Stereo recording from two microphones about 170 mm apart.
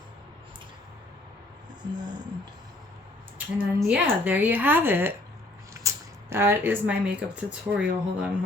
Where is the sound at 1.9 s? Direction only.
25° right (ahead or behind).